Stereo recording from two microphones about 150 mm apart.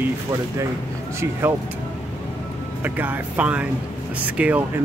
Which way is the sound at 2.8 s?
10° right (ahead or behind).